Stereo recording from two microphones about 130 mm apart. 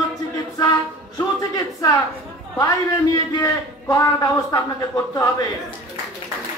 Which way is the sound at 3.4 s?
25° left (ahead or behind).